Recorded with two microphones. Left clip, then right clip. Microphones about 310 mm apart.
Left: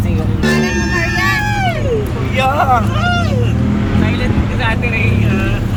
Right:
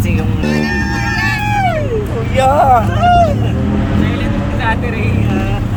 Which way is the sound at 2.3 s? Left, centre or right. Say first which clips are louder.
Right 3 dB; right.